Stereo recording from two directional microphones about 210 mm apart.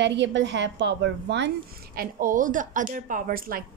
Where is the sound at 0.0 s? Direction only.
55° right (ahead or behind).